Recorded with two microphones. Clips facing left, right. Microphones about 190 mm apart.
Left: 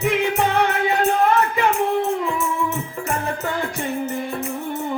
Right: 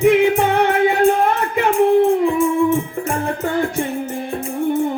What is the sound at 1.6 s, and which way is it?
Music, 50° right (ahead or behind).